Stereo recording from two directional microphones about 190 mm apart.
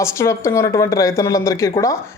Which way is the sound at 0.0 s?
15° left (ahead or behind).